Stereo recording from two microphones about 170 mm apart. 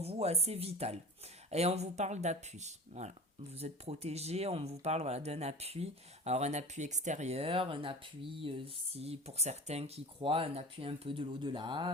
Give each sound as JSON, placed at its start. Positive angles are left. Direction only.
{"t": 0.0, "sound": "speech", "side_deg": -35}